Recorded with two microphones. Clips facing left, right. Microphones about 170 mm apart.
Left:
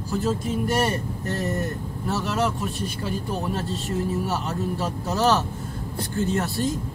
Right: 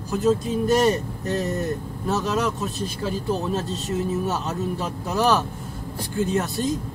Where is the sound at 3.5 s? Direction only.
20° right (ahead or behind).